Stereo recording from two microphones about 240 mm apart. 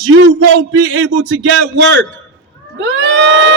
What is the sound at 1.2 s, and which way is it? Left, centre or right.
Speech, right.